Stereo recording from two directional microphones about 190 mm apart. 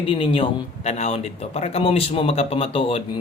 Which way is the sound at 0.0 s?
25° left (ahead or behind).